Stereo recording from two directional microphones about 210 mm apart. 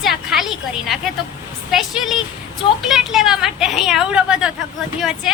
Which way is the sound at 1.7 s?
Centre (ahead or behind).